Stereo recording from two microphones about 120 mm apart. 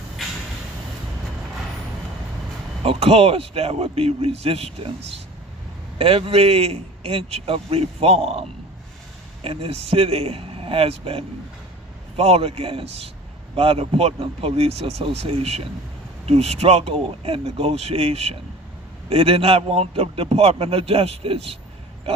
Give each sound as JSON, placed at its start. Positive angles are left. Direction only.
{"t": 2.8, "sound": "a man's voice", "side_deg": -55}
{"t": 6.0, "sound": "a man's voice", "side_deg": -50}